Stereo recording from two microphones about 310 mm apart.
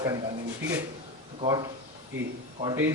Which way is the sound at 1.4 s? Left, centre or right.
Centre.